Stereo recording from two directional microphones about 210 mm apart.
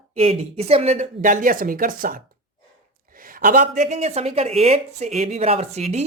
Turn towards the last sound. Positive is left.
turn(degrees=-30)  # may be behind; listen again after turning